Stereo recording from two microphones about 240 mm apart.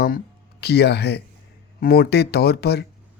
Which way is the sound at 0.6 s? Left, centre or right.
Left.